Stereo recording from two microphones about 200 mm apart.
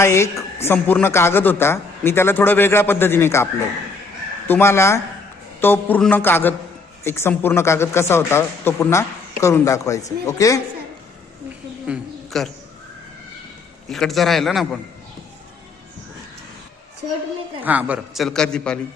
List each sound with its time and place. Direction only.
0.0 s a woman's voice: 15° left (ahead or behind)
11.9 s a sound: centre (ahead or behind)
13.9 s a man's voice: centre (ahead or behind)
17.6 s a man's voice: 10° right (ahead or behind)